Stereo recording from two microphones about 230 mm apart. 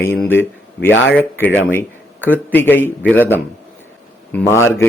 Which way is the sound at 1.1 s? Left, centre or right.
Centre.